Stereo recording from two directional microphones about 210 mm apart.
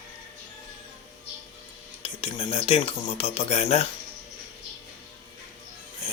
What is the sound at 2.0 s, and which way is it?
Speech, 25° left (ahead or behind).